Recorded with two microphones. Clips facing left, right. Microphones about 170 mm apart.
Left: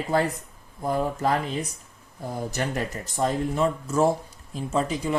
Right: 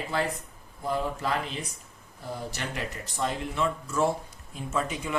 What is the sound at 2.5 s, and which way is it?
Speech, 45° left (ahead or behind).